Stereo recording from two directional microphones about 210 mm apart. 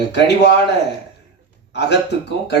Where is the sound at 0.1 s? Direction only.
55° left (ahead or behind).